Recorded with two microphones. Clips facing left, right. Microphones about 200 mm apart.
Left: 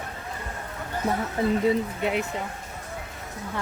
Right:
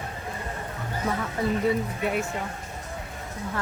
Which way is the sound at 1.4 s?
25° left (ahead or behind).